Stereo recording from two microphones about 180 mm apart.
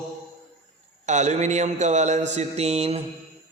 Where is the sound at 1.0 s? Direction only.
40° right (ahead or behind).